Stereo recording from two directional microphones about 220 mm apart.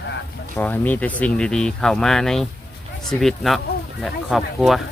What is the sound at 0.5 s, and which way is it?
Speech, 10° left (ahead or behind).